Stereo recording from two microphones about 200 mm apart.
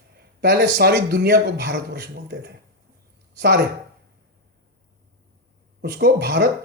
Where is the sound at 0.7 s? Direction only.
55° right (ahead or behind).